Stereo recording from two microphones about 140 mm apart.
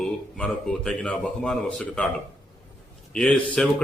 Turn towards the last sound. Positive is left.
turn(degrees=5)  # may be behind; listen again after turning